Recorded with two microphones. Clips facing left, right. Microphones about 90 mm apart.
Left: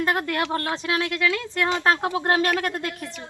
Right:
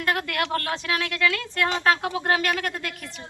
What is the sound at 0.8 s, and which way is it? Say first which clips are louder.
Speech: left 1 dB; 30° left (ahead or behind).